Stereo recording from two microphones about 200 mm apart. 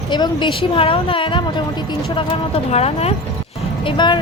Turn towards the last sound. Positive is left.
turn(degrees=25)  # may be behind; listen again after turning